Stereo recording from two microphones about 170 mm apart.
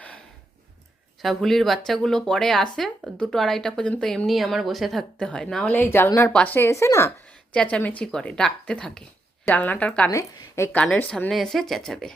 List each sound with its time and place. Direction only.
1.2 s speech: centre (ahead or behind); by 7.1 s 15° left (ahead or behind)
7.5 s speech: 5° left (ahead or behind)